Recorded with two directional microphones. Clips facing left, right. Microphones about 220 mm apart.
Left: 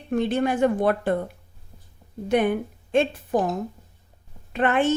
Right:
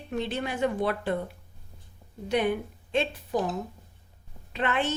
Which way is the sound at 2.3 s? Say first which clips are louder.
Left 5 dB; 50° left (ahead or behind).